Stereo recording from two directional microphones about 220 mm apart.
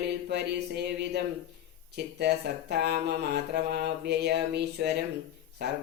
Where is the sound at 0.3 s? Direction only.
50° right (ahead or behind).